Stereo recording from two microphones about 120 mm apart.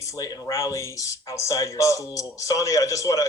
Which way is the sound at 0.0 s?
30° left (ahead or behind).